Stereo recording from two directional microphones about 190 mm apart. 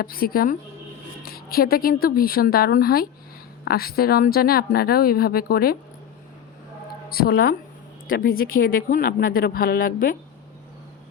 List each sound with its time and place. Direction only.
0.0 s speech: 50° left (ahead or behind)
7.1 s speech: 50° left (ahead or behind)